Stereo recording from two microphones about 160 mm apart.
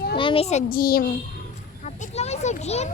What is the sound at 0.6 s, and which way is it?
Speech, 65° left (ahead or behind).